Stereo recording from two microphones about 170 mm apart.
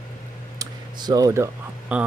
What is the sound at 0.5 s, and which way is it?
Typing, 20° right (ahead or behind).